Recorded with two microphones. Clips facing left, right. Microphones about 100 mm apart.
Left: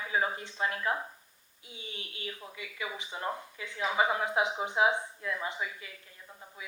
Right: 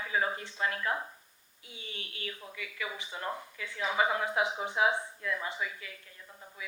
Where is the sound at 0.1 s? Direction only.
20° left (ahead or behind).